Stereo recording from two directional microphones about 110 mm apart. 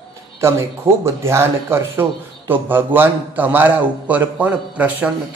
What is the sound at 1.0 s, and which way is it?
A man's voice, 25° right (ahead or behind).